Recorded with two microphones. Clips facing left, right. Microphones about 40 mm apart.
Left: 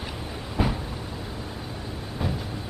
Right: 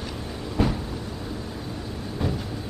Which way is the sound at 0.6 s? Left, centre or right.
Centre.